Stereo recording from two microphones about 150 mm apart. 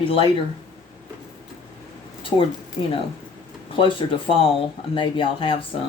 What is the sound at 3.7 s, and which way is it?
Speech, 35° left (ahead or behind).